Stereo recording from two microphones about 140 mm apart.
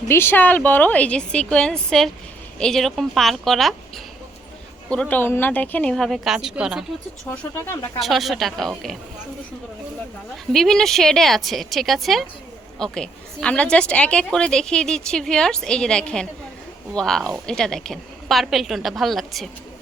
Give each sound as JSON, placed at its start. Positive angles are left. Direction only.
{"t": 0.1, "sound": "a woman's voice", "side_deg": 15}
{"t": 7.3, "sound": "a woman's voice", "side_deg": 15}
{"t": 7.9, "sound": "a woman's voice", "side_deg": 0}
{"t": 10.5, "sound": "a woman's voice", "side_deg": 5}